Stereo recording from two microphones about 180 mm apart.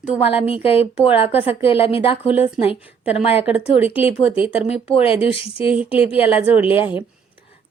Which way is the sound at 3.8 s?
35° left (ahead or behind).